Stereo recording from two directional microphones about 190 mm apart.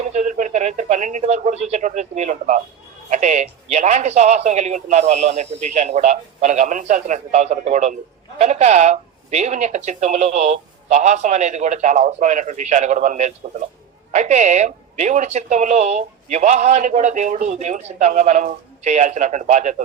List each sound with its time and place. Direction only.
0.1 s speech: 40° right (ahead or behind)